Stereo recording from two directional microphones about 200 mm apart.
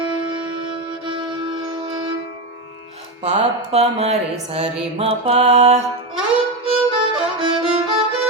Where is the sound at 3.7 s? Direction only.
30° right (ahead or behind).